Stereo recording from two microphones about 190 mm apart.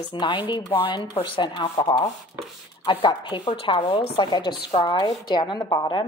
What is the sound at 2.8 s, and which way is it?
A woman's voice, 25° left (ahead or behind).